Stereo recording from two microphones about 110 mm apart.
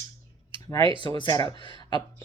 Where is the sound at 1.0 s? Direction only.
45° left (ahead or behind).